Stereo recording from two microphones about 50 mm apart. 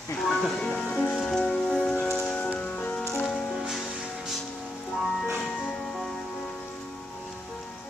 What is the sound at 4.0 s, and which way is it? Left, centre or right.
Music, centre.